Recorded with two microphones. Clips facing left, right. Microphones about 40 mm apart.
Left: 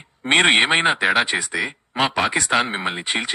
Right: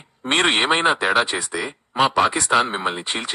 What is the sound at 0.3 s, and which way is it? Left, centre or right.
Speech, centre.